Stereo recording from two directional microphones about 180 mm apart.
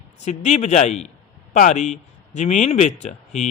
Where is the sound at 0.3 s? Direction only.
40° left (ahead or behind).